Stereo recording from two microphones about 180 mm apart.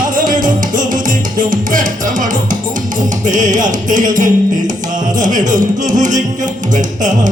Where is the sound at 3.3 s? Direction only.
45° right (ahead or behind).